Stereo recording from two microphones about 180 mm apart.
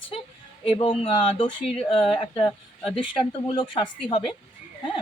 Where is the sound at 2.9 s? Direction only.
25° left (ahead or behind).